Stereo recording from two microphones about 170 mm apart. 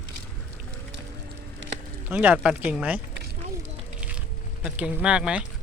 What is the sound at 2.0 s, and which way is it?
Speech, 10° right (ahead or behind).